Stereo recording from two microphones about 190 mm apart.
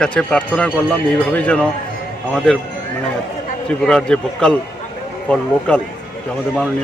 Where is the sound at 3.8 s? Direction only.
5° left (ahead or behind).